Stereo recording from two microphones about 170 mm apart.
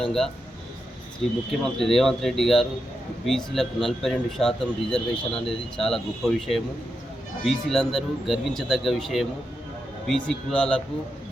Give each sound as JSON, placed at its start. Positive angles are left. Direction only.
{"t": 0.0, "sound": "a man's voice", "side_deg": 0}